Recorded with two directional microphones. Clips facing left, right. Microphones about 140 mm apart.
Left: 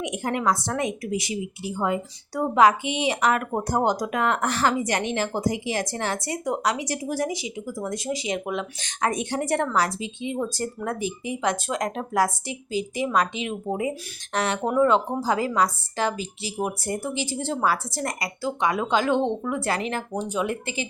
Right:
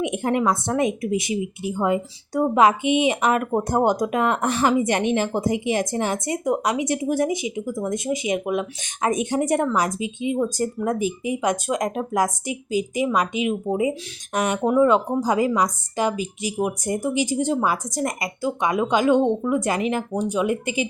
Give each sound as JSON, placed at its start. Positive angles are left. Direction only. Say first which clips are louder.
{"t": 0.0, "sound": "a woman's voice", "louder": "right 4 dB", "side_deg": -25}